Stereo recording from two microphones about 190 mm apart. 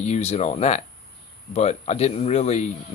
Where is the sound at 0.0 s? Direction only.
35° left (ahead or behind).